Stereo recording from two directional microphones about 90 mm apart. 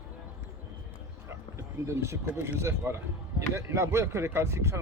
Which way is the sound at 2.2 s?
25° right (ahead or behind).